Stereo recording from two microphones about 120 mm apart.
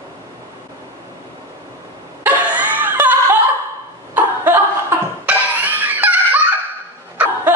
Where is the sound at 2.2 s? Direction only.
15° right (ahead or behind).